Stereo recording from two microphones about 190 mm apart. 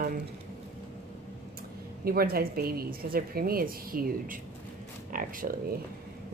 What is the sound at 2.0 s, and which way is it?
A woman's voice, 55° right (ahead or behind).